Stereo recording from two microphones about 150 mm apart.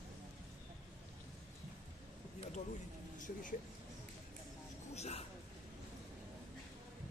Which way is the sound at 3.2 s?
60° left (ahead or behind).